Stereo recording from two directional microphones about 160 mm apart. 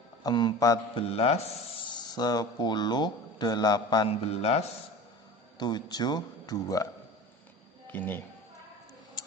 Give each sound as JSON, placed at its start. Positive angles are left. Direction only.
{"t": 0.2, "sound": "speech", "side_deg": 25}
{"t": 0.9, "sound": "a man's voice", "side_deg": 35}
{"t": 1.8, "sound": "speech", "side_deg": 25}
{"t": 4.1, "sound": "a man's voice", "side_deg": 40}
{"t": 5.5, "sound": "speech", "side_deg": 25}
{"t": 7.9, "sound": "speech", "side_deg": 10}